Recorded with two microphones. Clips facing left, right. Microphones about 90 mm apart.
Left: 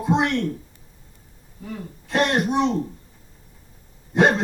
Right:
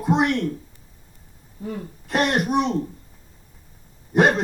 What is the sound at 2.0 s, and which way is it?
Speech, 5° right (ahead or behind).